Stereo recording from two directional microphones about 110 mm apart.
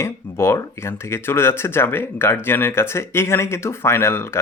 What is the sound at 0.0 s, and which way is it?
Speech, 25° left (ahead or behind).